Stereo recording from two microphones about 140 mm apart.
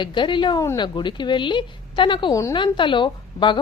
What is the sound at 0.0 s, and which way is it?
A woman's voice, 35° left (ahead or behind).